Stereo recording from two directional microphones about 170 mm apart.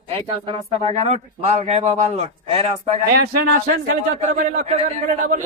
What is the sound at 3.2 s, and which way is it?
A man's voice, 70° right (ahead or behind).